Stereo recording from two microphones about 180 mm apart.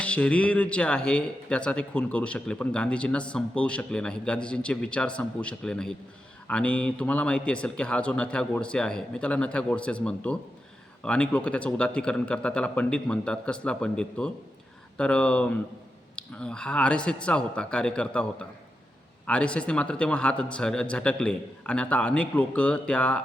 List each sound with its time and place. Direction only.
0.0 s speech: 5° left (ahead or behind)